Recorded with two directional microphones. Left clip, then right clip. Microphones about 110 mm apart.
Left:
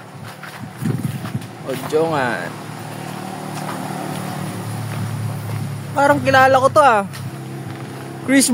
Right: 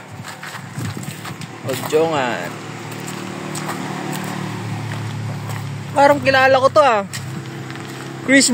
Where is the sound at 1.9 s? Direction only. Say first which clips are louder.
Right 1 dB; 15° left (ahead or behind).